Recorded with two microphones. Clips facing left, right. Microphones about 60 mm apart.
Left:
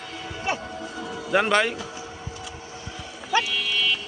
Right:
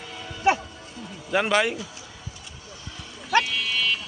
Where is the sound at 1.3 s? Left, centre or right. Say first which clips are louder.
Left 1 dB; centre.